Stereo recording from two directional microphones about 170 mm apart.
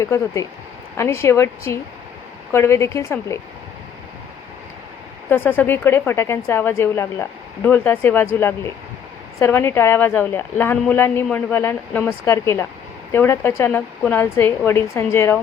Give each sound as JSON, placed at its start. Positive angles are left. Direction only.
{"t": 0.0, "sound": "a woman's voice", "side_deg": 20}
{"t": 5.3, "sound": "a woman's voice", "side_deg": 10}